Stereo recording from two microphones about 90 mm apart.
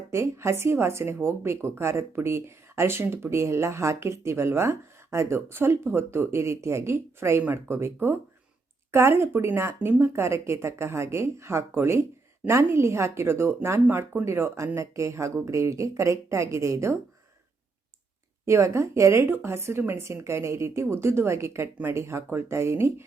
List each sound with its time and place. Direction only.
0.1 s speech: 30° right (ahead or behind)
18.4 s speech: 30° right (ahead or behind)